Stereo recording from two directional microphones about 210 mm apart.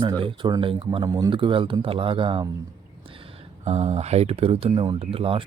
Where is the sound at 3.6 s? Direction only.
30° right (ahead or behind).